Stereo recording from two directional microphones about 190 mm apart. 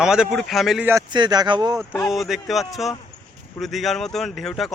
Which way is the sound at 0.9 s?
20° right (ahead or behind).